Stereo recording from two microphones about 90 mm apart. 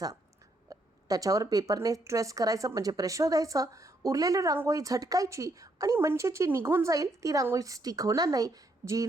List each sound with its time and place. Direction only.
0.7 s a woman's voice: 40° right (ahead or behind)